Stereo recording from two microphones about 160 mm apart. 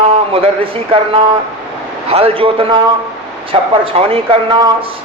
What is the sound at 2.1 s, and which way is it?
A man's voice, 35° right (ahead or behind).